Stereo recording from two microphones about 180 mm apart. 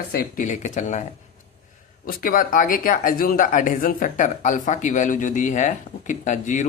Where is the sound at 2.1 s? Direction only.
55° left (ahead or behind).